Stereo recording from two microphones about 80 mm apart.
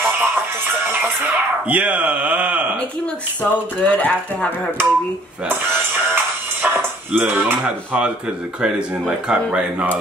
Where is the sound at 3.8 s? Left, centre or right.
Centre.